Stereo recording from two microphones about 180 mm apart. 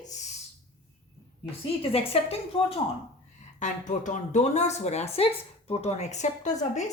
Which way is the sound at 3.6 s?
45° left (ahead or behind).